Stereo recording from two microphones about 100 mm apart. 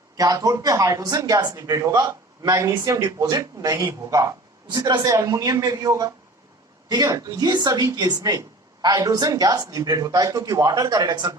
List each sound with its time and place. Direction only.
0.2 s speech: 40° right (ahead or behind)